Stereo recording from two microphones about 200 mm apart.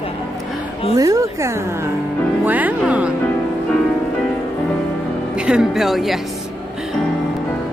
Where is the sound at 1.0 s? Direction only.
15° right (ahead or behind).